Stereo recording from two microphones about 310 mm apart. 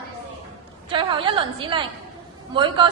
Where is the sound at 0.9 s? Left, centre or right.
Centre.